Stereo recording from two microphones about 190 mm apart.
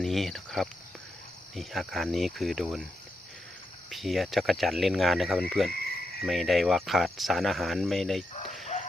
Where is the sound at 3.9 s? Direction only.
Centre (ahead or behind).